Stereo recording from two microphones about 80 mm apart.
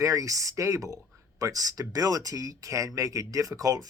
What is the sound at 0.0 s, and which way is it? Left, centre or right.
Speech, right.